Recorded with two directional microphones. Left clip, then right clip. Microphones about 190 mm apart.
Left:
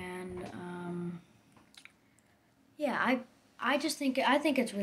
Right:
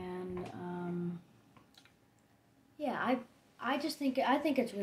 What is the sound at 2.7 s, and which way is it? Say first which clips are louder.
A woman's voice: left 4 dB; 10° left (ahead or behind).